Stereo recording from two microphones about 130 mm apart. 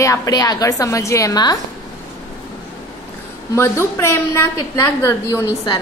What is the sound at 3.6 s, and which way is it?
Speech, 20° left (ahead or behind).